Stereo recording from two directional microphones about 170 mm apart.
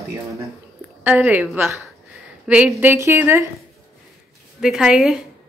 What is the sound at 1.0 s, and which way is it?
A woman's voice, 10° right (ahead or behind).